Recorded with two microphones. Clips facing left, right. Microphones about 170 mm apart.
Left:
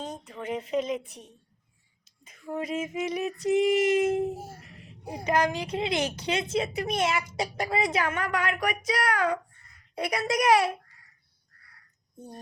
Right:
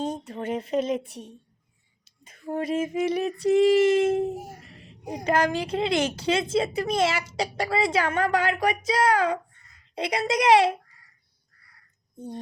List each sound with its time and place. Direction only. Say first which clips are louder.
0.3 s speech: right 3 dB; 45° right (ahead or behind)
2.0 s speech: right 4 dB; 30° right (ahead or behind)
4.4 s speech: right 3 dB; 15° right (ahead or behind)
5.2 s a woman's voice: right 2 dB; 30° right (ahead or behind)
7.0 s a child's voice: right 3 dB; 90° right
7.7 s speech: right 4 dB; 30° right (ahead or behind)